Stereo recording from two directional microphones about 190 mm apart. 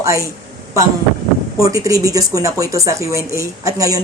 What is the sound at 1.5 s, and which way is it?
Speech, 15° right (ahead or behind).